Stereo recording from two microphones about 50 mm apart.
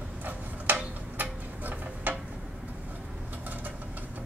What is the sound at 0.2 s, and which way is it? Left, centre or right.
Tick-tock, right.